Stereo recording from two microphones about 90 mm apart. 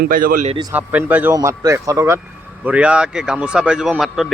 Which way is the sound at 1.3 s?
35° right (ahead or behind).